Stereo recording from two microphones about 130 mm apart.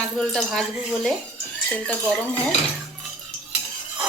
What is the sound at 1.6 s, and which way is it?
Speech, 10° left (ahead or behind).